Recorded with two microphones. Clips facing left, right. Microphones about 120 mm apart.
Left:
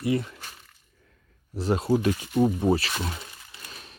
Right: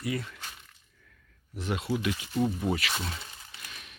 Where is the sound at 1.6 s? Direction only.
35° left (ahead or behind).